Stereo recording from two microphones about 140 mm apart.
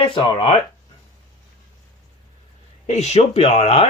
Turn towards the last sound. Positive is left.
turn(degrees=50)  # may be behind; listen again after turning